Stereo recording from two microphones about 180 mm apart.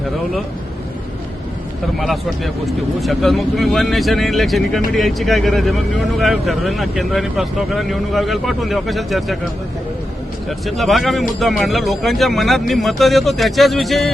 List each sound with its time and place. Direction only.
2.0 s speech: centre (ahead or behind)
10.7 s speech: centre (ahead or behind)